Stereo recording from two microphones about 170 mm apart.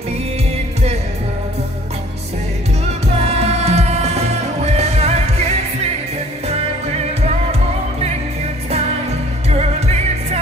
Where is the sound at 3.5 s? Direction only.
40° right (ahead or behind).